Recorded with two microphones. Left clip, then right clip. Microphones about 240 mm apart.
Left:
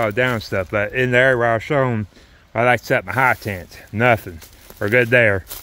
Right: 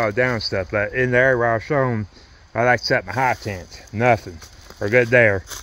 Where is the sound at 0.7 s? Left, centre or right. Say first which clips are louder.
Left 2 dB; centre.